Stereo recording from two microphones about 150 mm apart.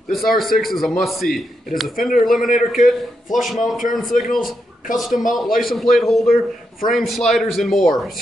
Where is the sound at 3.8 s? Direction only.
60° left (ahead or behind).